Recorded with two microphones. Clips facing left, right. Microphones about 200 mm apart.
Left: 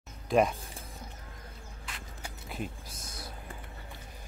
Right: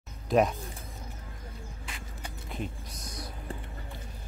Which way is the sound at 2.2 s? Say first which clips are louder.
Right 1 dB; 5° left (ahead or behind).